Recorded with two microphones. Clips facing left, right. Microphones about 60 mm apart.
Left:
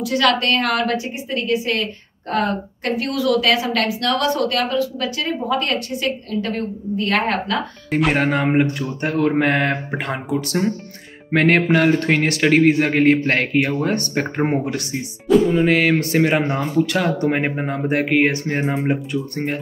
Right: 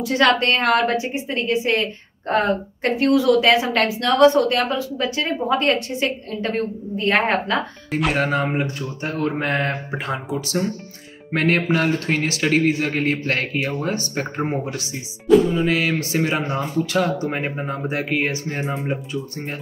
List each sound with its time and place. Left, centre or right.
0.0 s a woman's voice: right
8.1 s a man's voice: left